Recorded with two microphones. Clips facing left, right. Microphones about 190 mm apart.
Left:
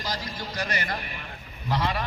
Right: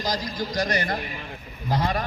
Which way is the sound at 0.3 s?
35° right (ahead or behind).